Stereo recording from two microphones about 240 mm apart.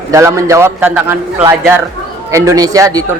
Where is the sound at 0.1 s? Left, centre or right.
Centre.